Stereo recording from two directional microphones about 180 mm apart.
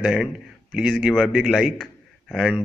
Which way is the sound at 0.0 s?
5° right (ahead or behind).